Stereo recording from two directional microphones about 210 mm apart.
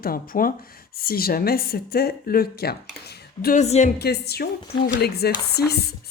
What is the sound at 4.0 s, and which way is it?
Speech, 50° left (ahead or behind).